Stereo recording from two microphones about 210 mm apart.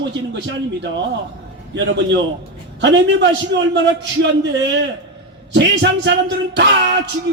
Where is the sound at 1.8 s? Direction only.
60° right (ahead or behind).